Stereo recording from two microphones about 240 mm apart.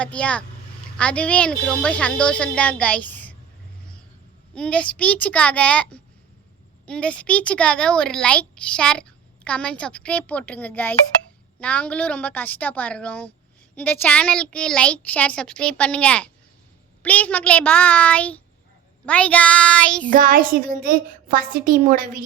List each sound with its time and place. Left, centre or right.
0.0 s a woman's voice: centre
4.5 s a woman's voice: centre
20.1 s a woman's voice: right